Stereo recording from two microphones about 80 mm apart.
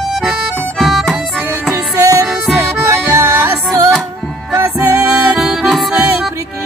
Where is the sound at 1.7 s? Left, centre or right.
Right.